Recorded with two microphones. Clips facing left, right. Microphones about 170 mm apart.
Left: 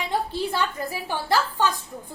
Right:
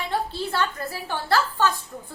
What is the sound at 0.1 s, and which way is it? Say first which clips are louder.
A woman's voice: left 1 dB; 15° left (ahead or behind).